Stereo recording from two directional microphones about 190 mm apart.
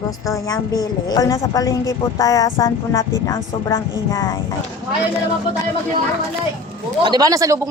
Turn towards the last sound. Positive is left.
turn(degrees=-15)  # may be behind; listen again after turning